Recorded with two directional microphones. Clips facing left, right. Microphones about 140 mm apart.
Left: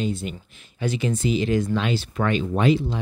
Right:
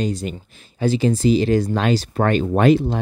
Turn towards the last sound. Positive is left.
turn(degrees=-50)  # may be behind; listen again after turning